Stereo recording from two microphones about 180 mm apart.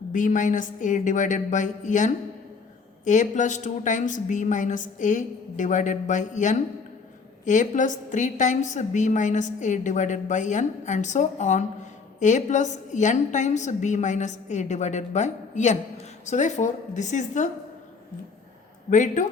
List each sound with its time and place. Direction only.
0.1 s a woman's voice: 45° left (ahead or behind)
18.9 s a woman's voice: 45° left (ahead or behind)